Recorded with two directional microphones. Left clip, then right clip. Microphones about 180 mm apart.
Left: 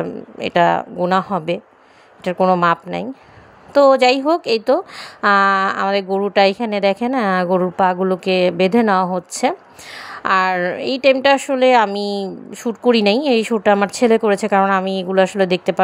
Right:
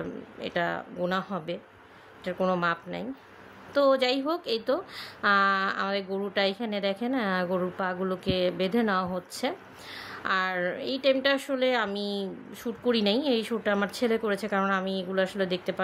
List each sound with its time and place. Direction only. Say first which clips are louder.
0.0 s speech: left 12 dB; 40° left (ahead or behind)